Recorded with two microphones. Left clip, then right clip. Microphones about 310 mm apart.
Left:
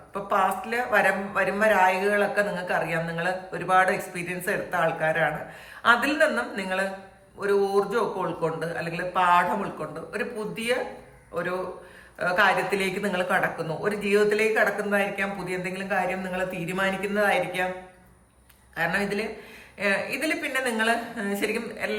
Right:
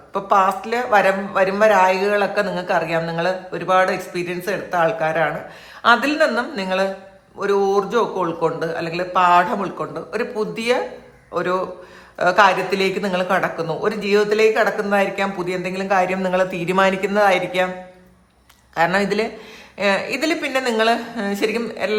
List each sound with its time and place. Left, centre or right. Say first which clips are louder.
0.1 s a woman's voice: right 8 dB; centre
12.2 s a woman's voice: right 7 dB; centre
18.7 s a woman's voice: right 8 dB; centre